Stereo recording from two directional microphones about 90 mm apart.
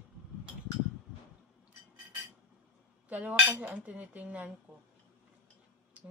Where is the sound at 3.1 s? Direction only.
15° right (ahead or behind).